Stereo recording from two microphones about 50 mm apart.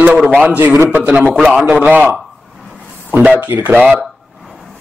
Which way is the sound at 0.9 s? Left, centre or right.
Right.